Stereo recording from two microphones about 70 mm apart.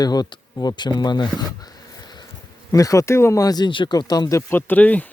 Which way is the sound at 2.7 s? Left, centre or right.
Left.